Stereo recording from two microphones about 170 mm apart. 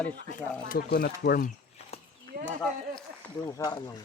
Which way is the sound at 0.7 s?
60° left (ahead or behind).